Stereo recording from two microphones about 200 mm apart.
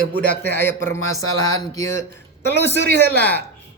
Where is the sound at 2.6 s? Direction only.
55° right (ahead or behind).